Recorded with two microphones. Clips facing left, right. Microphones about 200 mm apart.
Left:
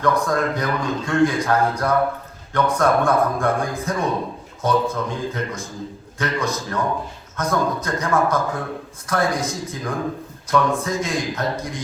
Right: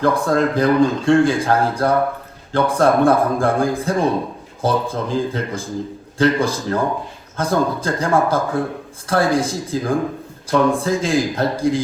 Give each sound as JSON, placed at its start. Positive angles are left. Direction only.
{"t": 0.0, "sound": "a man's voice", "side_deg": -30}